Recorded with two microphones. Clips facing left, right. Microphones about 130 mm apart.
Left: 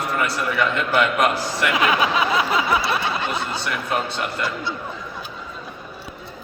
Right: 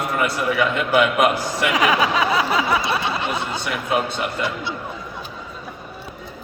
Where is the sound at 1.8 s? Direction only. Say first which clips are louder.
Right 1 dB; 30° right (ahead or behind).